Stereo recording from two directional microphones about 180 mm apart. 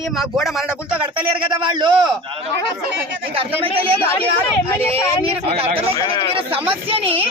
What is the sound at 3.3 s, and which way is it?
Speech, 30° right (ahead or behind).